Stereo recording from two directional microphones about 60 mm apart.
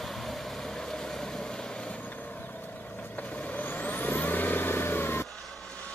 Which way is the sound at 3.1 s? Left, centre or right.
Left.